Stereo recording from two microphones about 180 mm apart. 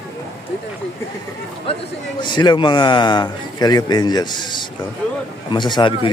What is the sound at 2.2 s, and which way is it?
A man's voice, 25° left (ahead or behind).